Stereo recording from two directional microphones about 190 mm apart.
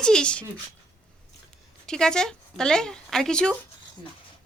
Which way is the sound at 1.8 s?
5° left (ahead or behind).